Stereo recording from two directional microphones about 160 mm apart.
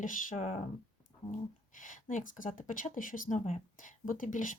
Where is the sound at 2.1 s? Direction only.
55° left (ahead or behind).